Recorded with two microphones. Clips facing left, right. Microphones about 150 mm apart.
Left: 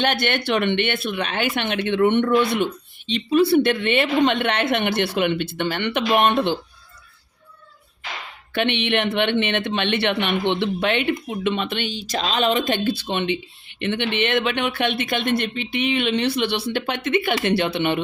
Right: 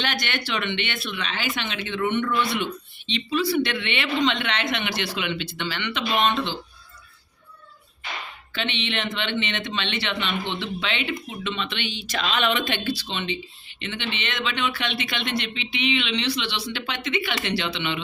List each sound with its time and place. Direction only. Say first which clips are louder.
0.0 s a woman's voice: left 7 dB; 55° left (ahead or behind)
8.5 s speech: left 8 dB; 60° left (ahead or behind)